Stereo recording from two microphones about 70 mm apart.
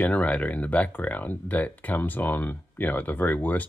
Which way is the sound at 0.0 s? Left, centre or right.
Centre.